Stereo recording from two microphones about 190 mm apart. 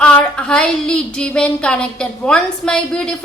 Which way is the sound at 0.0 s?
5° left (ahead or behind).